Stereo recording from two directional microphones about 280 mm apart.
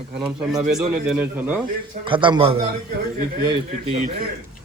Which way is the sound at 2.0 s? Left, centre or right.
Centre.